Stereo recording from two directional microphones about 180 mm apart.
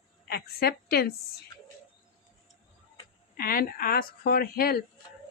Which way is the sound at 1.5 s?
20° left (ahead or behind).